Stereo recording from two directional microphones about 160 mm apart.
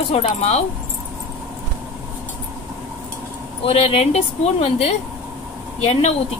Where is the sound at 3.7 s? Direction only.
40° left (ahead or behind).